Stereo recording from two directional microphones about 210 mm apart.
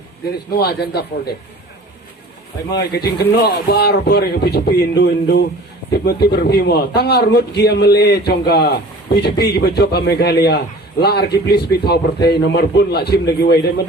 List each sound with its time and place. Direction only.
0.3 s a man's voice: 50° left (ahead or behind)
2.6 s a man's voice: 50° left (ahead or behind)